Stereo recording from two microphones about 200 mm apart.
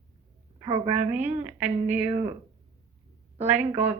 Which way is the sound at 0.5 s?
25° right (ahead or behind).